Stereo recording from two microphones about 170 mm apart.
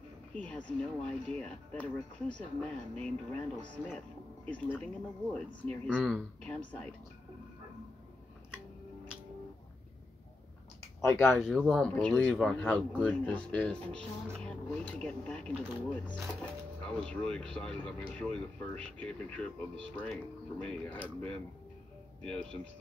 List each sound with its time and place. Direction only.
0.3 s speech: 5° left (ahead or behind)
4.5 s speech: 10° left (ahead or behind)
11.0 s speech: 15° left (ahead or behind)
11.3 s speech: centre (ahead or behind)